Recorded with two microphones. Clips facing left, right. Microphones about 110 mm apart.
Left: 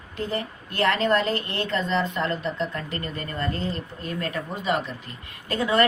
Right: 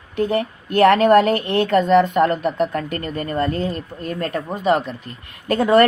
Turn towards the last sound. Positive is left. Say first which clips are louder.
# right 8 dB
turn(degrees=-50)  # may be behind; listen again after turning